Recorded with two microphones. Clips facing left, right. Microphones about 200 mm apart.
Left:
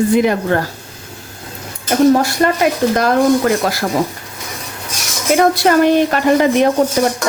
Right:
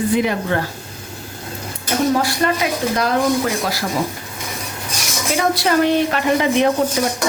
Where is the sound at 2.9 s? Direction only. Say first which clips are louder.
Left 3 dB; 50° left (ahead or behind).